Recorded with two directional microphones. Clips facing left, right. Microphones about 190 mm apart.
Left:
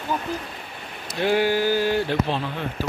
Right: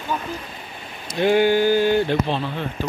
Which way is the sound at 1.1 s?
5° left (ahead or behind).